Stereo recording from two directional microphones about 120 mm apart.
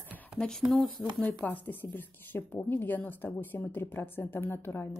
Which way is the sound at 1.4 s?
15° left (ahead or behind).